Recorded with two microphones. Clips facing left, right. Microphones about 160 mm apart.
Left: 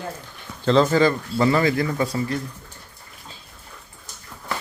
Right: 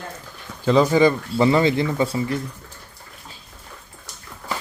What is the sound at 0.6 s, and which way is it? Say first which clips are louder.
Speech: right 1 dB; 10° right (ahead or behind).